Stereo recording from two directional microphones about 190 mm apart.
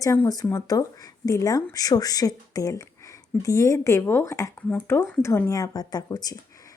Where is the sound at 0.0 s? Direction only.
15° left (ahead or behind).